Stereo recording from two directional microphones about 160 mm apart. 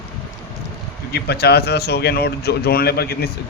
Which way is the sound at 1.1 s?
85° left.